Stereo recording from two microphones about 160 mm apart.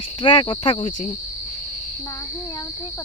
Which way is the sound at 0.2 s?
30° left (ahead or behind).